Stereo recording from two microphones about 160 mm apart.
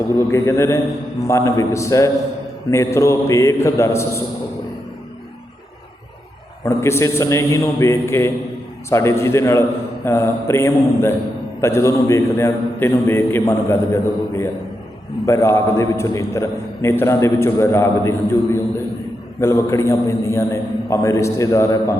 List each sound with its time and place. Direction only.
0.3 s a man's voice: 20° left (ahead or behind)
6.7 s a man's voice: 15° left (ahead or behind)